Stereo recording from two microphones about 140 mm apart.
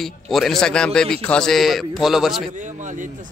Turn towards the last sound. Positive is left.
turn(degrees=-65)  # may be behind; listen again after turning